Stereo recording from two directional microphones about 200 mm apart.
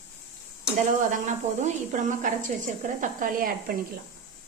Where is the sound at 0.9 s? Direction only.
40° right (ahead or behind).